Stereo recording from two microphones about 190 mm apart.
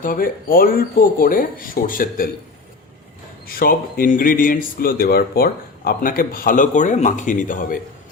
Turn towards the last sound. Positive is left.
turn(degrees=45)  # may be behind; listen again after turning